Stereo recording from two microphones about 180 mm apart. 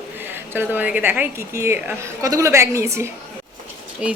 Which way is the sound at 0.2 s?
10° right (ahead or behind).